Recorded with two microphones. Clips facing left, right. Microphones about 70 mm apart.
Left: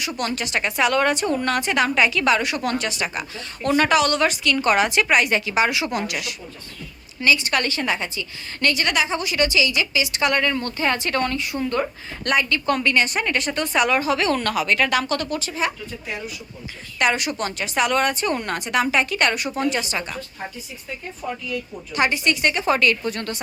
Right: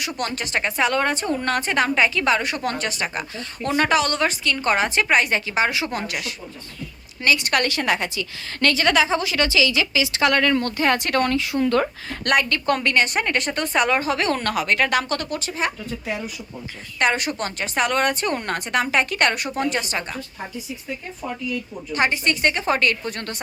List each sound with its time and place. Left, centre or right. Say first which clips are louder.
0.2 s a woman's voice: left 1 dB; right
7.2 s a woman's voice: even; right
17.0 s a woman's voice: even; right
21.9 s a woman's voice: left 1 dB; right